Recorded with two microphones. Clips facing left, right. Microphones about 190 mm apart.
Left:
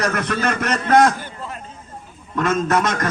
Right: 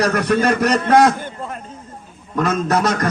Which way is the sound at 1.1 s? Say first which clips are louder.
Right 4 dB; 50° right (ahead or behind).